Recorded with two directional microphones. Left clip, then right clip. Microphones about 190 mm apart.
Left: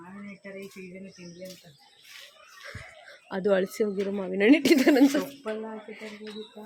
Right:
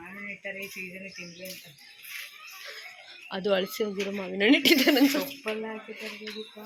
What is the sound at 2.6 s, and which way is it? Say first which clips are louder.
Speech: left 2 dB; 30° left (ahead or behind).